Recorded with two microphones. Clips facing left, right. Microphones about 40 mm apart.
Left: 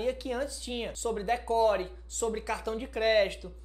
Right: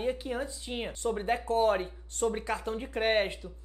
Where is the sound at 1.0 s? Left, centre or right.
Centre.